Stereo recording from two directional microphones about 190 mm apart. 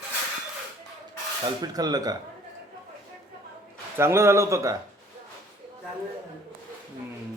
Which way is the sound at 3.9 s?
15° right (ahead or behind).